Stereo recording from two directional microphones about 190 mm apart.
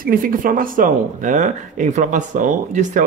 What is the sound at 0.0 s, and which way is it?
A man's voice, 50° right (ahead or behind).